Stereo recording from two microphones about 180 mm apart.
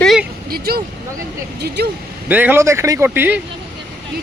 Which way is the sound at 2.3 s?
10° right (ahead or behind).